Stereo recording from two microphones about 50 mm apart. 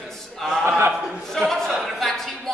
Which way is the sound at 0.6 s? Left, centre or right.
Right.